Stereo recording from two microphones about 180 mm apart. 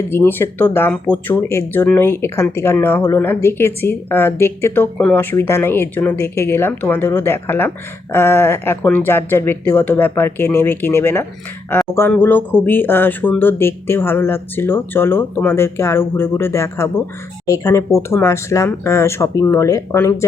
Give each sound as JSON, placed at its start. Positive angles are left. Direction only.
{"t": 0.1, "sound": "speech", "side_deg": 10}